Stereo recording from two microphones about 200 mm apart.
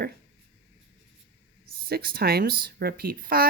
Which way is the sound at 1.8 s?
50° right (ahead or behind).